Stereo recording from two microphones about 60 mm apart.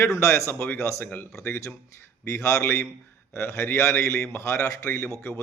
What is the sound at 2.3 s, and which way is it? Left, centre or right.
Speech, left.